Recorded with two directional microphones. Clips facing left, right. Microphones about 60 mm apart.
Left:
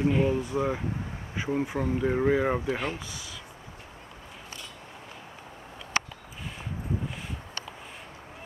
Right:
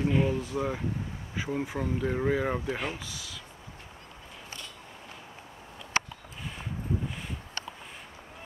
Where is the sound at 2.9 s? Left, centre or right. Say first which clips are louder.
Left 2 dB; left.